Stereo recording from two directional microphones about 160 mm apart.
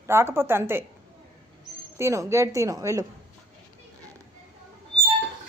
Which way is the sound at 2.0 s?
20° right (ahead or behind).